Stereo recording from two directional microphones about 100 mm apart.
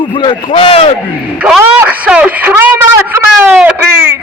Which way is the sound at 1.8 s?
15° right (ahead or behind).